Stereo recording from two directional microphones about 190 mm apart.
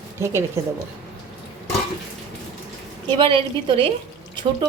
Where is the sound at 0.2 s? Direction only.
15° right (ahead or behind).